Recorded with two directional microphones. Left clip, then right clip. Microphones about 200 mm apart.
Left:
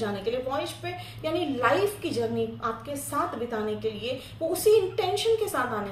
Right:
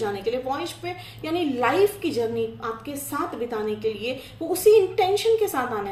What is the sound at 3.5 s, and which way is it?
A woman's voice, 30° right (ahead or behind).